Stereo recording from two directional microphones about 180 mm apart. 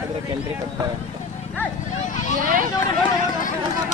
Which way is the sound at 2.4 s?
50° right (ahead or behind).